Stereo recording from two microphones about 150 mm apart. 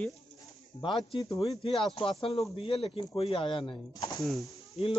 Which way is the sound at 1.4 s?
40° left (ahead or behind).